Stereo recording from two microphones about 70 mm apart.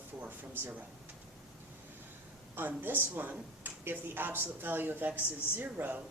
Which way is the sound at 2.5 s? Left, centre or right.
Right.